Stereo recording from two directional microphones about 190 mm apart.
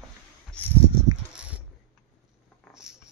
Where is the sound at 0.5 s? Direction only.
10° left (ahead or behind).